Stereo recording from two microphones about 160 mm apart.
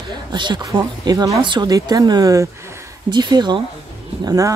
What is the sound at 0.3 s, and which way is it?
Speech, 30° right (ahead or behind).